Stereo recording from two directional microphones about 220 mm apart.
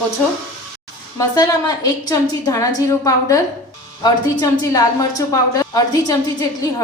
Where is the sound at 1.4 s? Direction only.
15° left (ahead or behind).